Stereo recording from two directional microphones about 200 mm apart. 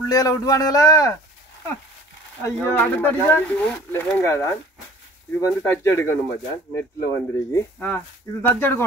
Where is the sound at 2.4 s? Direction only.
10° left (ahead or behind).